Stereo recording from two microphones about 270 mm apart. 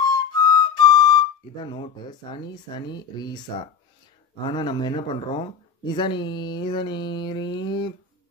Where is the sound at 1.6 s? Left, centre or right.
Centre.